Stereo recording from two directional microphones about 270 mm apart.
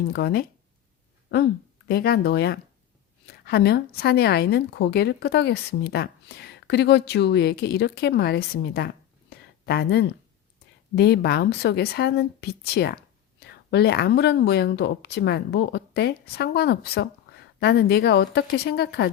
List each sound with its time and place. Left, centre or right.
0.1 s speech: left
1.9 s speech: left
9.3 s a sound: left
10.9 s speech: left